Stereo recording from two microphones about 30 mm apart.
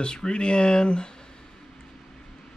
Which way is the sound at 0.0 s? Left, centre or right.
Left.